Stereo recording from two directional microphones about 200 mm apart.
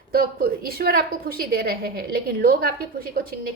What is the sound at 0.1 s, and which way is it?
A woman's voice, 50° right (ahead or behind).